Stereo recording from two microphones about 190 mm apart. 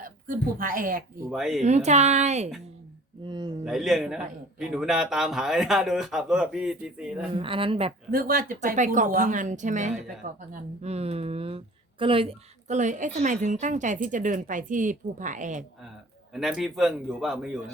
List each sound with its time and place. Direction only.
0.0 s speech: 45° right (ahead or behind)
1.3 s a man's voice: centre (ahead or behind)
1.6 s a woman's voice: 35° right (ahead or behind)
3.2 s speech: 25° right (ahead or behind)
3.6 s a man's voice: centre (ahead or behind)
7.3 s speech: 30° right (ahead or behind)
8.1 s a woman's voice: 50° right (ahead or behind)
16.3 s a man's voice: centre (ahead or behind)